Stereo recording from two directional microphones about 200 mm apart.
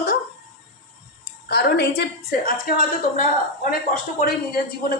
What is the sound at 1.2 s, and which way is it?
A woman's voice, 50° left (ahead or behind).